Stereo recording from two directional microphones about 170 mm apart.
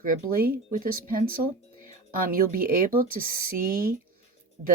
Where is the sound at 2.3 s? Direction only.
55° right (ahead or behind).